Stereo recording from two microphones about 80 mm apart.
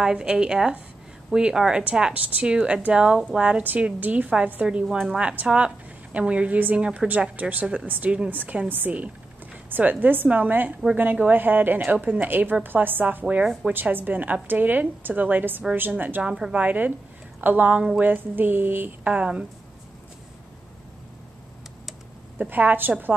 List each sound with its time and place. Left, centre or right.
0.0 s a woman's voice: centre
22.4 s speech: right